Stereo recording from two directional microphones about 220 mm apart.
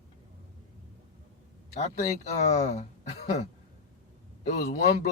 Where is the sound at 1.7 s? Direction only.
30° left (ahead or behind).